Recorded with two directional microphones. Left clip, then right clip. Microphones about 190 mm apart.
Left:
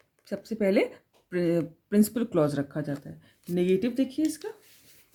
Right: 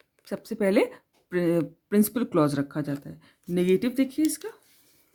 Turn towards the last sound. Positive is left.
turn(degrees=-40)  # may be behind; listen again after turning